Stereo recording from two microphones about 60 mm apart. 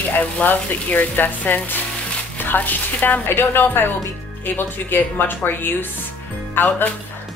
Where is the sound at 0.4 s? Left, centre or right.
Left.